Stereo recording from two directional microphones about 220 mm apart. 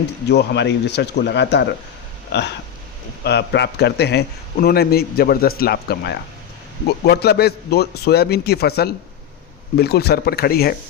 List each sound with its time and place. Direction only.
0.3 s a man's voice: 50° left (ahead or behind)